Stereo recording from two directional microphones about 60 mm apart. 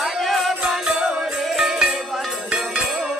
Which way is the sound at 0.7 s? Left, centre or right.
Centre.